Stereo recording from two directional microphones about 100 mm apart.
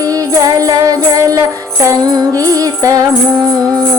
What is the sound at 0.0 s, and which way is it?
Music, 35° right (ahead or behind).